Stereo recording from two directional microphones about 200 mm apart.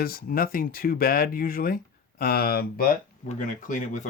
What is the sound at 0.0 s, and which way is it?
Speech, 50° left (ahead or behind).